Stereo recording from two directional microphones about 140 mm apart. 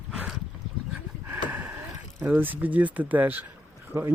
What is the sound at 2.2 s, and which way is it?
Speech, 15° right (ahead or behind).